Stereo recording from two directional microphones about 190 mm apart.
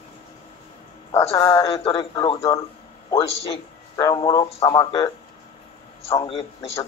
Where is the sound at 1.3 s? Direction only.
20° left (ahead or behind).